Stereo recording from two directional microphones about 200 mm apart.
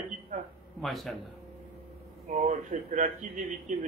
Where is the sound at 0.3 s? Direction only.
40° right (ahead or behind).